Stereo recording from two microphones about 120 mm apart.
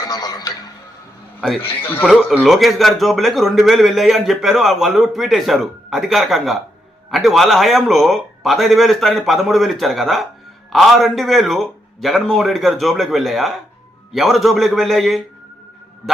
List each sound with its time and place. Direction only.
0.0 s music: 35° left (ahead or behind)
2.4 s a man's voice: centre (ahead or behind)